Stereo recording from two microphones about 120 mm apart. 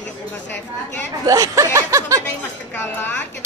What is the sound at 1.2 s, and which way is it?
Speech, 30° right (ahead or behind).